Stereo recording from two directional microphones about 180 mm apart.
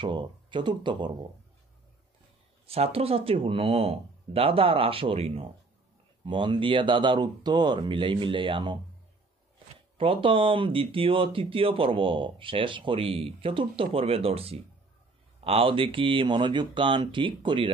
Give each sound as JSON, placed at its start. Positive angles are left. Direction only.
{"t": 0.0, "sound": "speech", "side_deg": -25}
{"t": 2.6, "sound": "speech", "side_deg": -35}
{"t": 9.9, "sound": "speech", "side_deg": -30}